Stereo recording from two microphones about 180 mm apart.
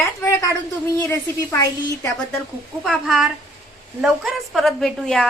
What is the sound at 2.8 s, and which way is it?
A woman's voice, centre (ahead or behind).